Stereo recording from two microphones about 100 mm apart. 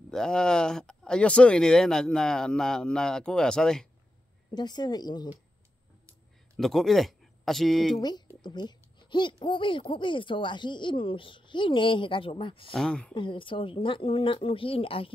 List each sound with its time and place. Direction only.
0.1 s speech: 5° left (ahead or behind)
4.5 s a woman's voice: 45° left (ahead or behind)
6.5 s speech: 5° left (ahead or behind)
8.4 s a sound: 45° left (ahead or behind)
9.4 s speech: 55° left (ahead or behind)
12.7 s speech: 5° left (ahead or behind)
13.1 s speech: 55° left (ahead or behind)